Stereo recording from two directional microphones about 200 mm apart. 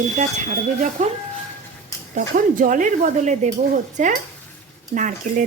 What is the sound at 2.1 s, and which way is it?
Speech, 40° right (ahead or behind).